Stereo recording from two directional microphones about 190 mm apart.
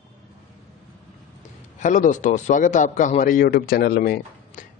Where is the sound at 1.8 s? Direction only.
40° left (ahead or behind).